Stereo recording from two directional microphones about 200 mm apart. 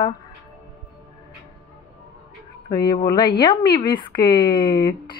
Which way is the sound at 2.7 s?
20° left (ahead or behind).